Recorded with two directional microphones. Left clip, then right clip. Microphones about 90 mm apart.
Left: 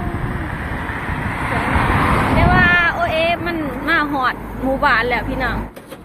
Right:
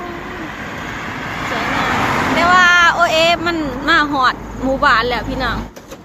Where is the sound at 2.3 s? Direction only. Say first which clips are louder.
Right 5 dB; 90° right; by 5.6 s 35° right (ahead or behind).